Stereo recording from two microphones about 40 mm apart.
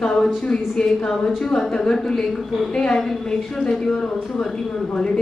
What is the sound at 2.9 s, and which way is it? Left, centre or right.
A woman's voice, centre.